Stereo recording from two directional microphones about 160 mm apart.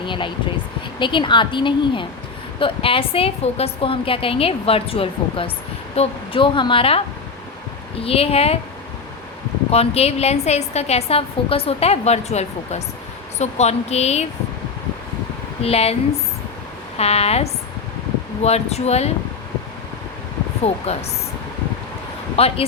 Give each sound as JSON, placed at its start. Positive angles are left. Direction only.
{"t": 0.0, "sound": "vehicle", "side_deg": 30}
{"t": 0.9, "sound": "a woman's voice", "side_deg": 30}
{"t": 8.0, "sound": "a woman's voice", "side_deg": 35}
{"t": 9.7, "sound": "a woman's voice", "side_deg": 40}
{"t": 15.6, "sound": "a woman's voice", "side_deg": 40}
{"t": 17.0, "sound": "a woman's voice", "side_deg": 40}
{"t": 20.9, "sound": "a woman's voice", "side_deg": 40}
{"t": 22.4, "sound": "a woman's voice", "side_deg": 35}